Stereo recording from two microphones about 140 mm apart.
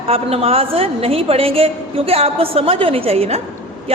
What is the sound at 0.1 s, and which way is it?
Speech, 45° right (ahead or behind).